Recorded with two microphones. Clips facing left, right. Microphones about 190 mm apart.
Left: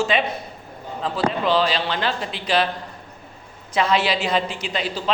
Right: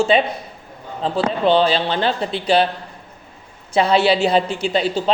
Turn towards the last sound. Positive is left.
turn(degrees=-35)  # may be behind; listen again after turning